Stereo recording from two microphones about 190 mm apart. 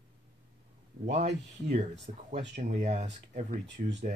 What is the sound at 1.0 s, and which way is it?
Speech, 40° right (ahead or behind).